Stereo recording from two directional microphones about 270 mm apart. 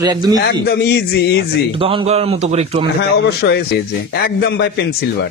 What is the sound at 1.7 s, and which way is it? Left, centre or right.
Speech, right.